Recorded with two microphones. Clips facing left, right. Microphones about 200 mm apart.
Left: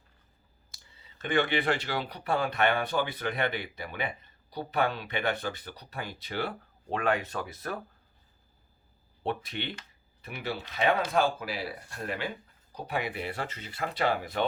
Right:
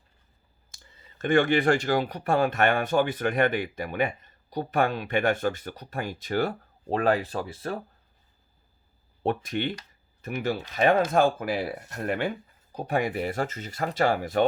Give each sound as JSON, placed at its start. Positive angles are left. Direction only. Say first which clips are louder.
{"t": 0.7, "sound": "speech", "louder": "right 4 dB", "side_deg": -50}
{"t": 9.2, "sound": "speech", "louder": "right 6 dB", "side_deg": -45}